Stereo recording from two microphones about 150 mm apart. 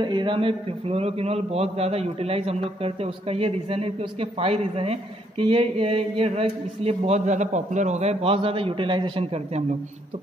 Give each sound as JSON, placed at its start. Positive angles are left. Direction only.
{"t": 0.0, "sound": "a man's voice", "side_deg": -30}